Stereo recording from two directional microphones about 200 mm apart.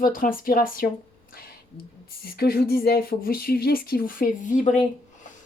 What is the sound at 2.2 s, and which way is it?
Speech, 50° left (ahead or behind).